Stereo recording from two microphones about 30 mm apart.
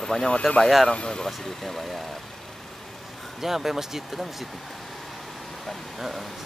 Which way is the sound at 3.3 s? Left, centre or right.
Centre.